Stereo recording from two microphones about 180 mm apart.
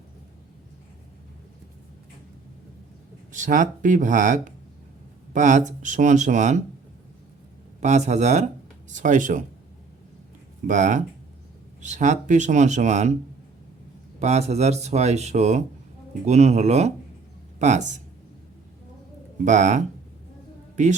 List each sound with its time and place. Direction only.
3.3 s speech: 45° right (ahead or behind)
7.8 s speech: 40° right (ahead or behind)
10.7 s speech: 45° right (ahead or behind)
14.2 s speech: 35° right (ahead or behind)
19.5 s speech: 40° right (ahead or behind)